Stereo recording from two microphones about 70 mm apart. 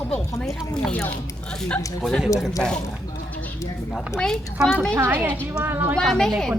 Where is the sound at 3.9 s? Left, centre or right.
Centre.